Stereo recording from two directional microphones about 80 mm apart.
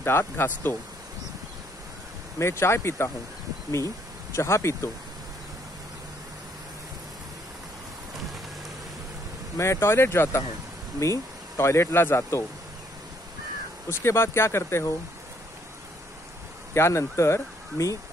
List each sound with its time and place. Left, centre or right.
0.0 s speech: left
2.3 s speech: left
4.4 s speech: left
9.6 s speech: left
13.8 s speech: left
16.7 s speech: left